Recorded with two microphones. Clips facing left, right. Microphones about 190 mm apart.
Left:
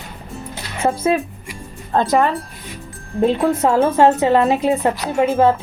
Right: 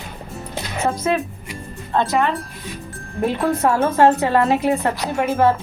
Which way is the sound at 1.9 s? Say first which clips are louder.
Left 3 dB; 40° left (ahead or behind).